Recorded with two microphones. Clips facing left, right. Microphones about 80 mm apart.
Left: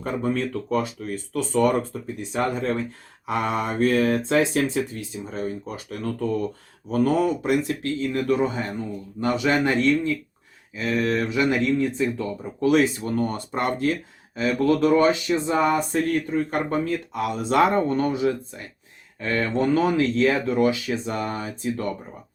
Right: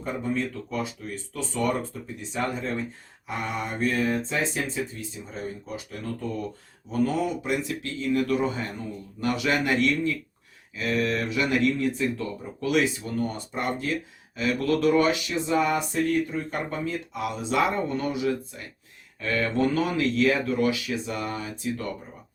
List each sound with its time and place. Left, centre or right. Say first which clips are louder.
0.0 s speech: left 3 dB; left
3.2 s speech: left 6 dB; left
8.3 s speech: left 3 dB; left
12.6 s speech: left 5 dB; left
14.3 s speech: left 4 dB; left